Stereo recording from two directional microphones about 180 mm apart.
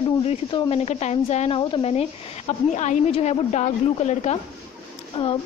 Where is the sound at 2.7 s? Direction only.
40° left (ahead or behind).